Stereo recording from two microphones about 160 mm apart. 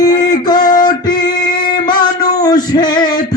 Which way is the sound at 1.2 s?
60° left (ahead or behind).